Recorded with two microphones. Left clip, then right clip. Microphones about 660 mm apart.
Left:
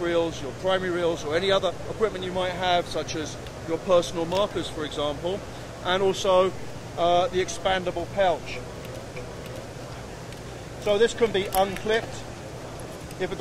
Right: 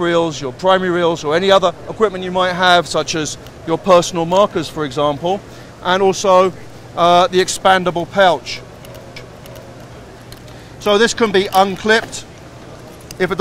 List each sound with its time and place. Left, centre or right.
0.0 s speech: right
5.9 s speech: right
7.0 s speech: right
10.9 s speech: right